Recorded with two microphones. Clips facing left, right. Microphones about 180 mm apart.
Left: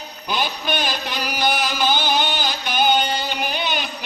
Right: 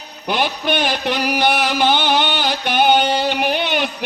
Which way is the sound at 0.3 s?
65° right (ahead or behind).